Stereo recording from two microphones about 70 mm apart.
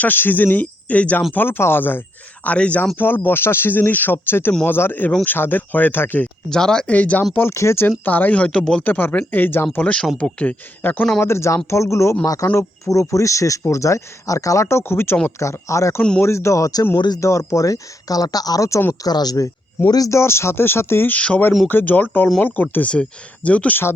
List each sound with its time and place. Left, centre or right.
0.0 s speech: left
3.0 s speech: left
6.5 s speech: centre
6.9 s speech: left
7.5 s speech: left
7.9 s speech: left
8.8 s speech: left
9.7 s speech: centre
11.2 s speech: left
15.4 s speech: left
19.0 s speech: left
20.1 s speech: left
21.1 s speech: left